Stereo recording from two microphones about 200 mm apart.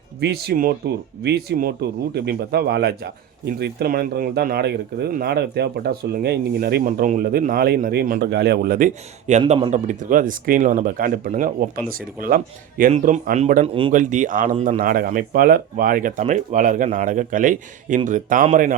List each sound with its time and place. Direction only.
0.2 s speech: 55° right (ahead or behind); by 9.4 s 40° right (ahead or behind)
9.4 s speech: 25° right (ahead or behind)